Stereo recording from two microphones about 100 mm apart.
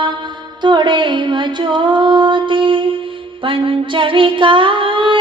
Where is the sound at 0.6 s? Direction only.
50° right (ahead or behind).